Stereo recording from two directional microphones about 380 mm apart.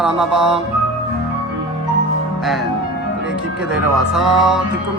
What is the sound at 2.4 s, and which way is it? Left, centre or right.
Music, centre.